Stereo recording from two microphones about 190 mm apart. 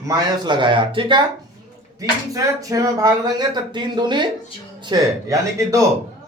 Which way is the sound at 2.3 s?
20° right (ahead or behind).